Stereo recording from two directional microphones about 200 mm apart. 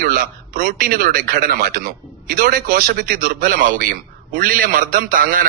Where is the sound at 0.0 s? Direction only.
45° right (ahead or behind).